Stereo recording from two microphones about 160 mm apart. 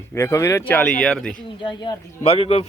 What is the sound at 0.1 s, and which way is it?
Speech, 15° left (ahead or behind).